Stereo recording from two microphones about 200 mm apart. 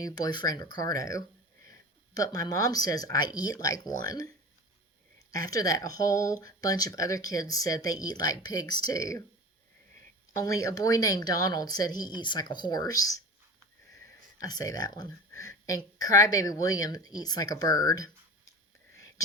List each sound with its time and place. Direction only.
0.3 s a woman's voice: 20° left (ahead or behind)
5.5 s speech: 15° left (ahead or behind)
10.3 s a woman's voice: 15° left (ahead or behind)
14.3 s speech: 20° left (ahead or behind)
18.9 s whispering: 15° left (ahead or behind)